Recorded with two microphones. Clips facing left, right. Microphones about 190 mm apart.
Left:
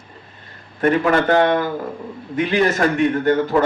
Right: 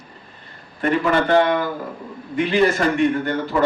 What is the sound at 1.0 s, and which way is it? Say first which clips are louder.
Speech: right 1 dB; 50° left (ahead or behind).